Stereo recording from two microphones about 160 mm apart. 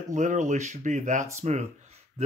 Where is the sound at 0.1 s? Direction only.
50° right (ahead or behind).